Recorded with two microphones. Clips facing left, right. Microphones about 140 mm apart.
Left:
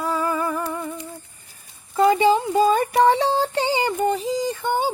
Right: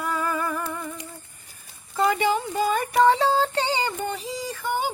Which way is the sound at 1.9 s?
25° left (ahead or behind).